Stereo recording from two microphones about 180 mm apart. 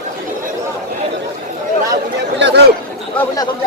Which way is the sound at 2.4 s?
75° right (ahead or behind).